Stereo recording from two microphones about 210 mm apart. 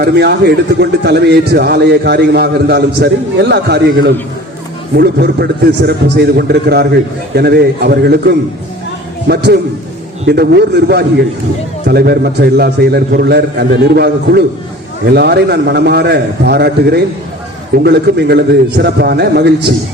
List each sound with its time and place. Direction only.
0.0 s a man's voice: 50° right (ahead or behind)